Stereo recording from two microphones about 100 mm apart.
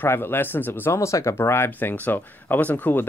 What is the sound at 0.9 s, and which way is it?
Speech, 30° left (ahead or behind).